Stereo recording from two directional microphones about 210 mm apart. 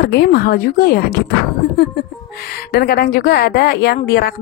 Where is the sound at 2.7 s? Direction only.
45° left (ahead or behind).